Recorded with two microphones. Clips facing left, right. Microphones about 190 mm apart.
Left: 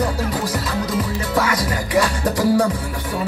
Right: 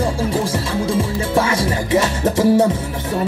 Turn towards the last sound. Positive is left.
turn(degrees=-25)  # may be behind; listen again after turning